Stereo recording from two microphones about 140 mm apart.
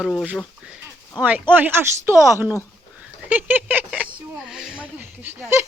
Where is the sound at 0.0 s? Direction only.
Centre (ahead or behind).